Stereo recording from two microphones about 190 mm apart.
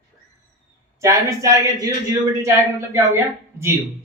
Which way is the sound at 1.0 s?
15° right (ahead or behind).